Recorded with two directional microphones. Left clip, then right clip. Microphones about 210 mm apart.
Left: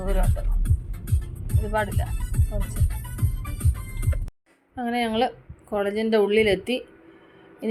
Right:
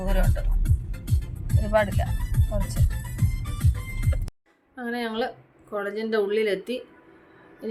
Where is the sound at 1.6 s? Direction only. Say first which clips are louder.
Right 3 dB; 5° right (ahead or behind).